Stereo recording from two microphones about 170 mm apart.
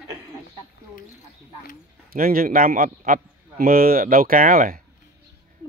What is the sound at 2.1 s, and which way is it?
A man's voice, 60° right (ahead or behind).